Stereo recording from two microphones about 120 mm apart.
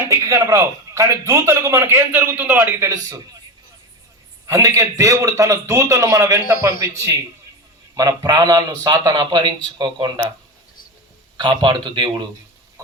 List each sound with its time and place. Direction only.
0.1 s a man's voice: 25° right (ahead or behind)
4.4 s a man's voice: 25° right (ahead or behind)
11.3 s a man's voice: 40° right (ahead or behind)